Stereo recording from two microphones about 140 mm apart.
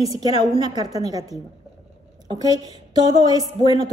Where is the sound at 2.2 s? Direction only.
30° right (ahead or behind).